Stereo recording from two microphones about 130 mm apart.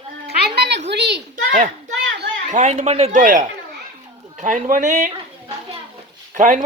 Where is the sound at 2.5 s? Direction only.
65° right (ahead or behind).